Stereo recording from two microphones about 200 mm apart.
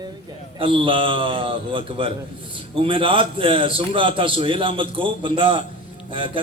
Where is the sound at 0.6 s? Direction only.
25° right (ahead or behind).